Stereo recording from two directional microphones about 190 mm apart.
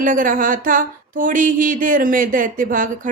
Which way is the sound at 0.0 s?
45° right (ahead or behind).